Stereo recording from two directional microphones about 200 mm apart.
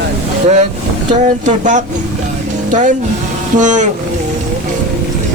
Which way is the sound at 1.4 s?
40° right (ahead or behind).